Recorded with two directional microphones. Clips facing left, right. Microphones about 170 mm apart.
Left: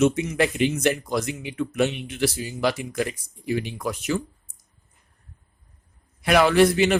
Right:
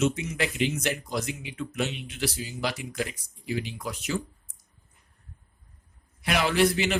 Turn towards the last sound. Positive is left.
turn(degrees=55)  # may be behind; listen again after turning